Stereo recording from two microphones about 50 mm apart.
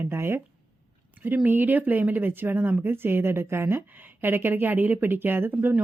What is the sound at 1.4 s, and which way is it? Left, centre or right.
Speech, right.